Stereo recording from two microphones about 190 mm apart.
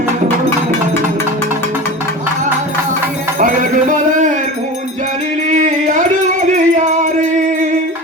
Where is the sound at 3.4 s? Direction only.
45° right (ahead or behind).